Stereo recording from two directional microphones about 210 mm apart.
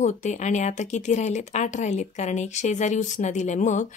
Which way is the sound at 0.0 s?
35° left (ahead or behind).